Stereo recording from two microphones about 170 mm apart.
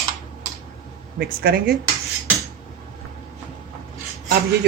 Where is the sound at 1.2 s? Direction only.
60° right (ahead or behind).